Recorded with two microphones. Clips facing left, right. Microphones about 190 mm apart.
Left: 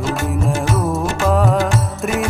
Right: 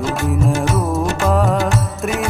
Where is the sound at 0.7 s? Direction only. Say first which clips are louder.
Right 1 dB; centre (ahead or behind).